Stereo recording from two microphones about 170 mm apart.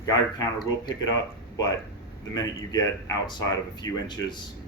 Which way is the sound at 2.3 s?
20° left (ahead or behind).